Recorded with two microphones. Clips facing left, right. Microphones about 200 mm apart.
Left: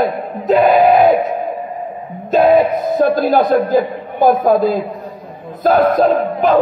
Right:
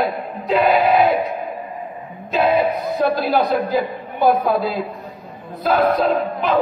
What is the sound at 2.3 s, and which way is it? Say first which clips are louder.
A man's voice: left 6 dB; 50° left (ahead or behind).